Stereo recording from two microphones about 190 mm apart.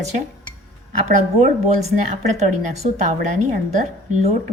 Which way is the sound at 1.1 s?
35° right (ahead or behind).